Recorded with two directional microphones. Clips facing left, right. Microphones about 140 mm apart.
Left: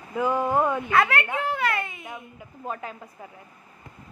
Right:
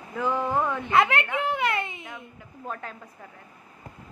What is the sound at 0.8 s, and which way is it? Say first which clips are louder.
Speech: even; 20° right (ahead or behind).